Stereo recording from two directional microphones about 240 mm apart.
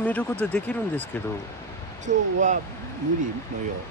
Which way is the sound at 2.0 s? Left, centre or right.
Right.